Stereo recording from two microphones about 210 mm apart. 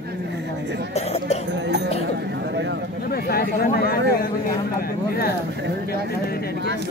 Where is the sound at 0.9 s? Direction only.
30° left (ahead or behind).